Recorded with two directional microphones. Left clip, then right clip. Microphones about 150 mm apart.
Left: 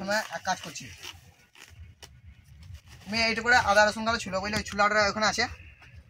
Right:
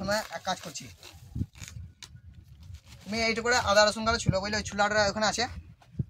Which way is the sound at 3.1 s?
30° right (ahead or behind).